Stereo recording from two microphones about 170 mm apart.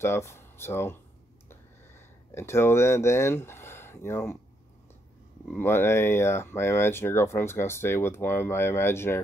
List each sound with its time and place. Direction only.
0.0 s speech: 15° left (ahead or behind)
1.5 s a sound: 15° left (ahead or behind)
5.5 s speech: 15° left (ahead or behind)